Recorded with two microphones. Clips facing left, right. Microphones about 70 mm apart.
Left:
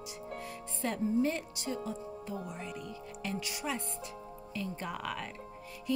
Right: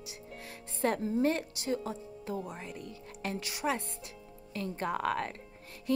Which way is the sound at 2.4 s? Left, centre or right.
Right.